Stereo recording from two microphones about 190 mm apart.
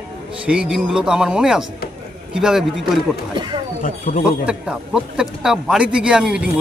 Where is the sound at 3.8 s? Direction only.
45° left (ahead or behind).